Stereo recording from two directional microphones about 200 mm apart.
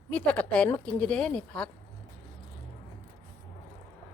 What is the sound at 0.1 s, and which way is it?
Speech, 5° left (ahead or behind).